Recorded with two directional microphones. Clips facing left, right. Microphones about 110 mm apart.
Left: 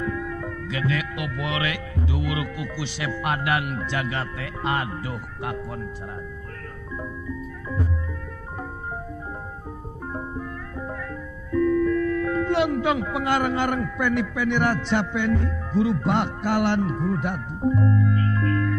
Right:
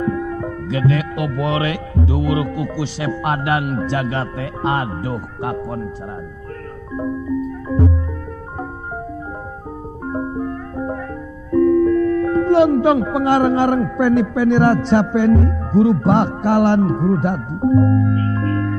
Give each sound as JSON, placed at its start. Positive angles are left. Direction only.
{"t": 0.0, "sound": "speech", "side_deg": -35}
{"t": 7.0, "sound": "music", "side_deg": -35}
{"t": 10.0, "sound": "music", "side_deg": -35}
{"t": 11.5, "sound": "speech", "side_deg": -35}